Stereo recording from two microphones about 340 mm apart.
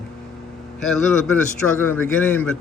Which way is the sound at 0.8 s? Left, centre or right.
Centre.